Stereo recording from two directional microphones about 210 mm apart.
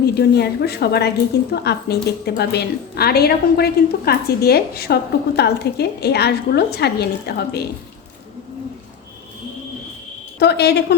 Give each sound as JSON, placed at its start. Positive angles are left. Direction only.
{"t": 0.0, "sound": "a woman's voice", "side_deg": 50}
{"t": 10.4, "sound": "a woman's voice", "side_deg": 50}